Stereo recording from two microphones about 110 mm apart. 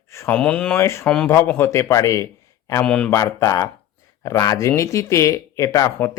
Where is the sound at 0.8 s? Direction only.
20° left (ahead or behind).